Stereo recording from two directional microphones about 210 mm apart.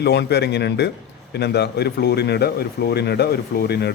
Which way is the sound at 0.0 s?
50° left (ahead or behind).